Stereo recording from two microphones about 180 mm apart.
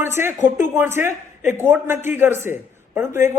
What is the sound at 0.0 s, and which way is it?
Speech, 15° right (ahead or behind).